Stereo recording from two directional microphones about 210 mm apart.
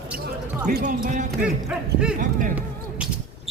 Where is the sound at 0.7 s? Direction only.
40° right (ahead or behind).